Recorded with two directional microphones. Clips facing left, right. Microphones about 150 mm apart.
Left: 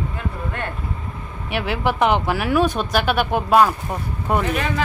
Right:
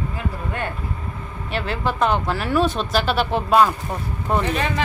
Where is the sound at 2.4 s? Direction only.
5° left (ahead or behind).